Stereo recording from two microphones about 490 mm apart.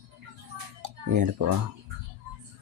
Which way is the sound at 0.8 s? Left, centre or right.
Right.